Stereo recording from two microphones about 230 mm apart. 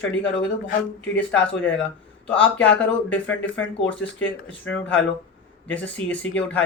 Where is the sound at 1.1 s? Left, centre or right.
Centre.